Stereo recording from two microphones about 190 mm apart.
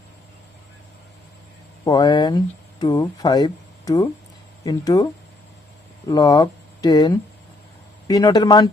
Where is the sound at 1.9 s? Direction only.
20° left (ahead or behind).